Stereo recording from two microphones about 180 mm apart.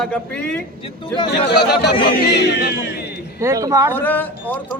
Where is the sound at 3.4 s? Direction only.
15° right (ahead or behind).